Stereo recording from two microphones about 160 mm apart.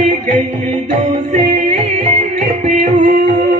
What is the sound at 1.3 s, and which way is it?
Music, 40° right (ahead or behind).